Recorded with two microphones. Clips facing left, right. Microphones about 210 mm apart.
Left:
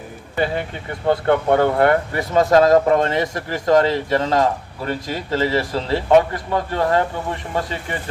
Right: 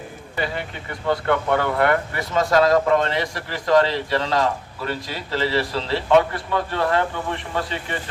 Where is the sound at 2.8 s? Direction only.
45° left (ahead or behind).